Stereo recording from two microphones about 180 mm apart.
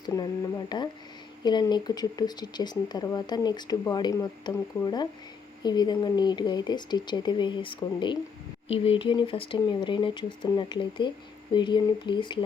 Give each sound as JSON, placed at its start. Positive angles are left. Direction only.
{"t": 0.0, "sound": "speech", "side_deg": 25}